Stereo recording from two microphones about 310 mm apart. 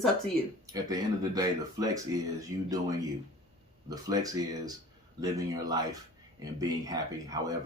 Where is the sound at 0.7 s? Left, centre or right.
Centre.